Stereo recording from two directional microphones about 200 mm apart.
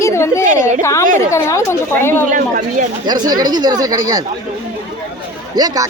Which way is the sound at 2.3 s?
40° right (ahead or behind).